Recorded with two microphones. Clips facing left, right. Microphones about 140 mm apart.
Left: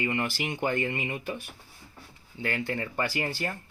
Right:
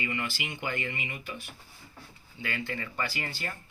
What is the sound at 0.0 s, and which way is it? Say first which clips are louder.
Speech: left 5 dB; 45° left (ahead or behind).